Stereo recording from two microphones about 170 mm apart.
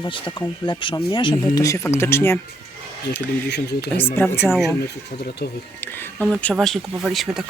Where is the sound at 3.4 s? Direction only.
75° left (ahead or behind).